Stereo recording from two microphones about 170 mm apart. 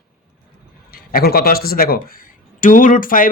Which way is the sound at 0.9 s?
65° left (ahead or behind).